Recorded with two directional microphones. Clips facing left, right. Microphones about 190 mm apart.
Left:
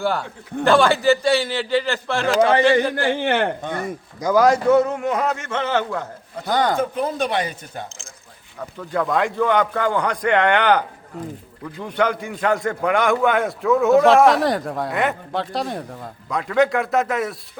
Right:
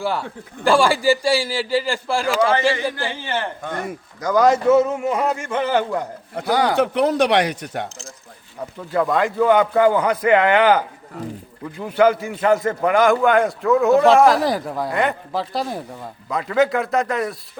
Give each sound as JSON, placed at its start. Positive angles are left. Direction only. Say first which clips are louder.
{"t": 0.0, "sound": "a man's voice", "louder": "left 1 dB", "side_deg": -5}
{"t": 2.9, "sound": "a man's voice", "louder": "left 6 dB", "side_deg": 55}
{"t": 4.2, "sound": "a man's voice", "louder": "even", "side_deg": 5}
{"t": 6.7, "sound": "speech", "louder": "right 5 dB", "side_deg": -75}
{"t": 8.9, "sound": "a man's voice", "louder": "right 2 dB", "side_deg": 0}